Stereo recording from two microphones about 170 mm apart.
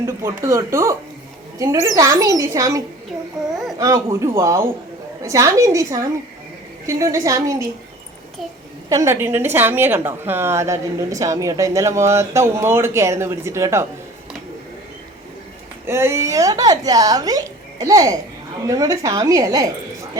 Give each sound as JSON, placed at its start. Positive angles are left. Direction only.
{"t": 0.0, "sound": "a woman's voice", "side_deg": -15}
{"t": 8.9, "sound": "a woman's voice", "side_deg": -20}
{"t": 15.9, "sound": "speech", "side_deg": -15}